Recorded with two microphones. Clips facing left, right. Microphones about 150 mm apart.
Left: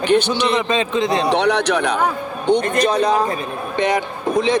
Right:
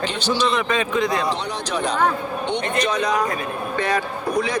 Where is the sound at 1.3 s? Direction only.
70° left (ahead or behind).